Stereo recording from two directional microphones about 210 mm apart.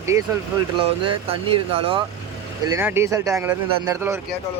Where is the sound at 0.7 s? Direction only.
25° right (ahead or behind).